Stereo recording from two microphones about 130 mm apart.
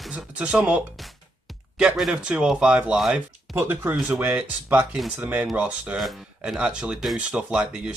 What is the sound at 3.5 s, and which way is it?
Speech, 15° right (ahead or behind).